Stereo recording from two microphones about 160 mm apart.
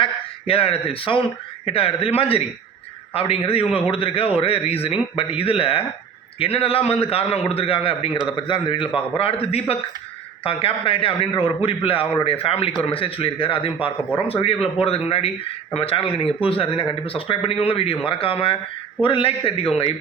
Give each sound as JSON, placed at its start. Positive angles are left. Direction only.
{"t": 0.0, "sound": "a man's voice", "side_deg": 35}